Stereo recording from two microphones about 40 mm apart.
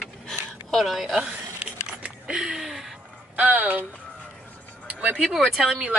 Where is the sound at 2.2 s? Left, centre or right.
Centre.